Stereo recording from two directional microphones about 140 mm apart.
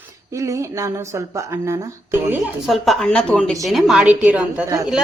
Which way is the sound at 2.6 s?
Centre (ahead or behind).